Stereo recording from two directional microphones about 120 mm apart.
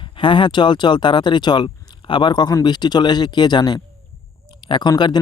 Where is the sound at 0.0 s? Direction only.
45° left (ahead or behind).